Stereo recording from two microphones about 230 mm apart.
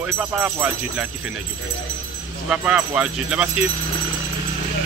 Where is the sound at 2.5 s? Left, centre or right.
Centre.